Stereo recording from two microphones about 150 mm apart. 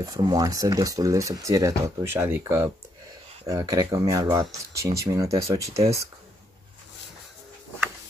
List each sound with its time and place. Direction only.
0.0 s speech: 25° right (ahead or behind)